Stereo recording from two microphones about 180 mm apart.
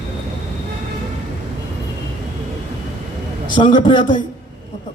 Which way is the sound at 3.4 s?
25° left (ahead or behind).